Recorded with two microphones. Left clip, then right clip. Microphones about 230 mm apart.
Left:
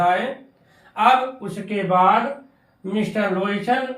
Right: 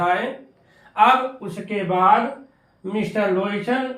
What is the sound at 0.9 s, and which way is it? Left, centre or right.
Speech, centre.